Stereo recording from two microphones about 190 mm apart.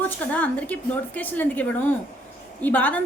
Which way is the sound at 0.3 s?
10° left (ahead or behind).